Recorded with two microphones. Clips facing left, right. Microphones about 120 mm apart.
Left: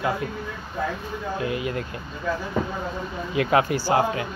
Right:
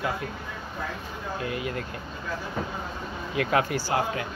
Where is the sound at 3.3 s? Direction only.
20° left (ahead or behind).